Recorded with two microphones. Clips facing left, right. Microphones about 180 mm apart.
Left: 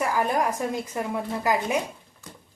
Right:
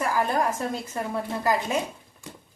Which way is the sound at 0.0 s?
15° left (ahead or behind).